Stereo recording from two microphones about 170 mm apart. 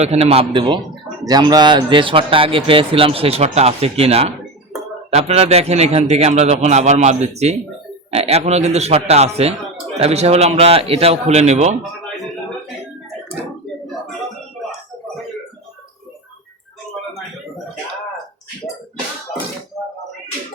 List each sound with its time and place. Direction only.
0.0 s speech: 40° right (ahead or behind)